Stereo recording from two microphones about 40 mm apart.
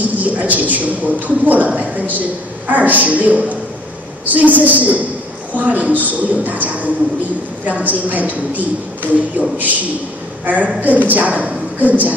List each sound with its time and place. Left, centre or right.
0.2 s a woman's voice: right